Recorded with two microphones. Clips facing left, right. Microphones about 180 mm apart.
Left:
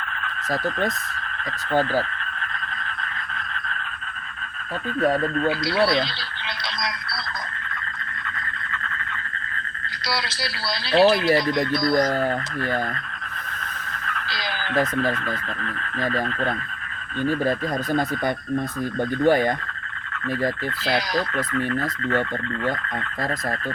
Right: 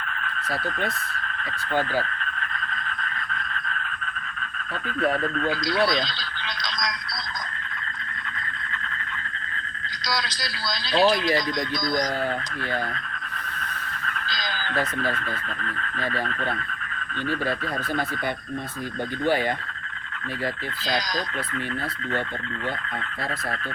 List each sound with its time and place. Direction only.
1.7 s speech: 40° left (ahead or behind)
4.9 s speech: 35° left (ahead or behind)
10.1 s speech: 25° left (ahead or behind)
14.3 s a sound: 30° left (ahead or behind)
19.2 s speech: 45° left (ahead or behind)
20.8 s speech: 25° left (ahead or behind)